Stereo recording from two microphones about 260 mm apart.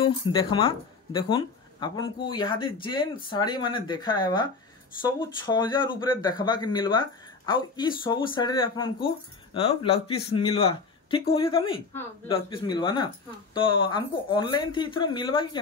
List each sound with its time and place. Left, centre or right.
0.2 s speech: centre